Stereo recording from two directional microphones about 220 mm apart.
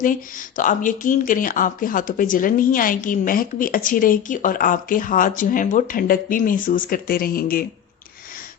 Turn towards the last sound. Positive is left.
turn(degrees=40)  # may be behind; listen again after turning